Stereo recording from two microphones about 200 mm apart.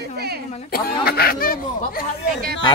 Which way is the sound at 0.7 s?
50° left (ahead or behind).